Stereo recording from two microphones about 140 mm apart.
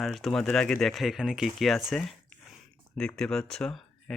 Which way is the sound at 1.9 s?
Centre (ahead or behind).